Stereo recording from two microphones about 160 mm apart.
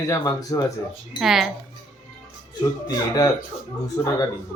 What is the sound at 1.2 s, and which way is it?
Speech, centre (ahead or behind).